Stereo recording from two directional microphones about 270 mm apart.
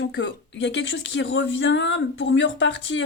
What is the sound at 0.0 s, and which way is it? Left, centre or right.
Speech, left.